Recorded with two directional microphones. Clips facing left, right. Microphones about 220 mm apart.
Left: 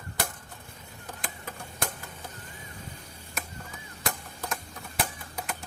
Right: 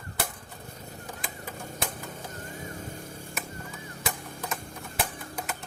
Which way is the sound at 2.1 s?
45° right (ahead or behind).